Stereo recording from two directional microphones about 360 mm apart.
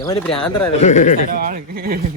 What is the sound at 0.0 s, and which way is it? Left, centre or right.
Speech, centre.